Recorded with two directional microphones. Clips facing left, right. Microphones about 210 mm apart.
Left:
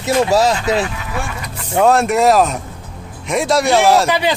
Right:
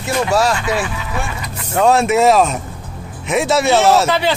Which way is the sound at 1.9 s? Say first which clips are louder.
Right 1 dB; centre (ahead or behind).